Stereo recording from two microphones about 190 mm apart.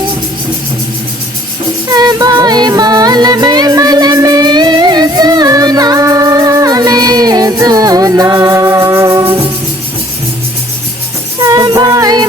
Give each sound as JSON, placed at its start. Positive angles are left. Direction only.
{"t": 1.9, "sound": "music", "side_deg": -20}
{"t": 11.4, "sound": "music", "side_deg": -20}